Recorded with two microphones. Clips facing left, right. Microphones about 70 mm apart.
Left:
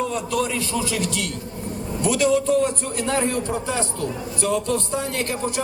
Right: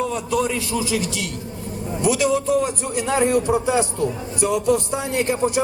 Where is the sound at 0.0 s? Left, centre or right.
Centre.